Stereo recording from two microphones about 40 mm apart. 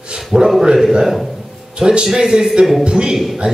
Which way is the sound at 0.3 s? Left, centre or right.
Centre.